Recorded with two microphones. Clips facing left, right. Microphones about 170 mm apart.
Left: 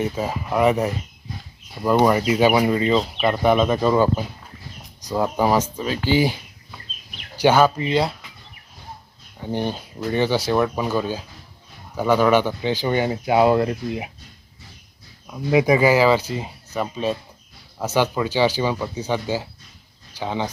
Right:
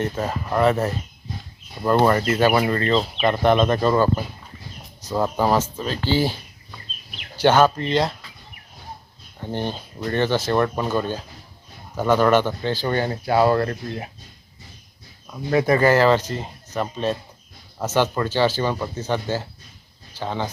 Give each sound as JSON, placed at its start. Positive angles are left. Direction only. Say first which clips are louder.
{"t": 0.0, "sound": "speech", "louder": "left 1 dB", "side_deg": 10}
{"t": 9.4, "sound": "speech", "louder": "left 2 dB", "side_deg": 10}
{"t": 15.3, "sound": "speech", "louder": "left 2 dB", "side_deg": 10}